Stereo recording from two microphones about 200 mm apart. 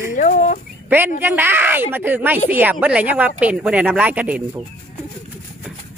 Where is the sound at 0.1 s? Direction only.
40° left (ahead or behind).